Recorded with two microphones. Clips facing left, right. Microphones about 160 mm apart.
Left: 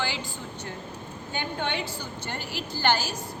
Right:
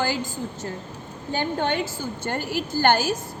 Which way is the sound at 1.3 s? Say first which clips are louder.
Right 6 dB; 45° right (ahead or behind).